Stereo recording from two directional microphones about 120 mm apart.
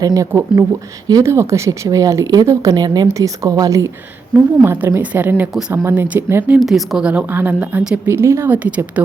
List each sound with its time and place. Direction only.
0.0 s speech: 30° right (ahead or behind)
6.6 s a woman's voice: centre (ahead or behind)